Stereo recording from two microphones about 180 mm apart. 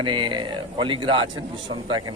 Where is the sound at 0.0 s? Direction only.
25° right (ahead or behind).